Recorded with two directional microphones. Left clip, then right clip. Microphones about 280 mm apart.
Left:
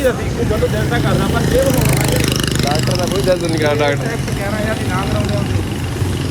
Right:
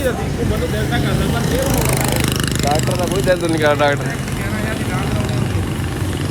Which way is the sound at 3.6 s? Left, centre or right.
Centre.